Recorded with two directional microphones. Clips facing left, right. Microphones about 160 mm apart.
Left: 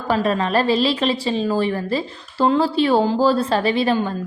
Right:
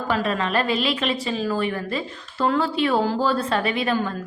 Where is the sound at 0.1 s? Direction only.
35° left (ahead or behind).